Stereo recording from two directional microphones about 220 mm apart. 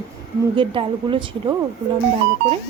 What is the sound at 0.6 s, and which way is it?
Speech, 25° right (ahead or behind).